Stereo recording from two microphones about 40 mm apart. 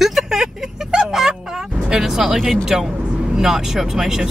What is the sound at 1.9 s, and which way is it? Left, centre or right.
Speech, centre.